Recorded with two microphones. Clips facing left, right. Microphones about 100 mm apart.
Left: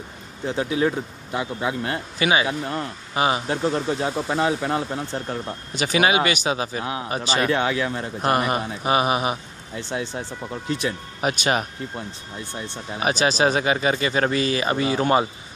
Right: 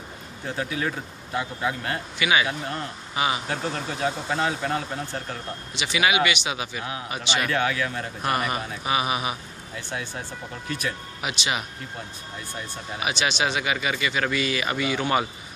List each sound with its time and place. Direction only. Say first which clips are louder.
0.6 s speech: left 6 dB; 25° left (ahead or behind)
5.7 s speech: left 4 dB; 40° left (ahead or behind); by 11.0 s 25° left (ahead or behind)
11.1 s speech: left 9 dB; 45° left (ahead or behind)
12.6 s speech: left 6 dB; 40° left (ahead or behind)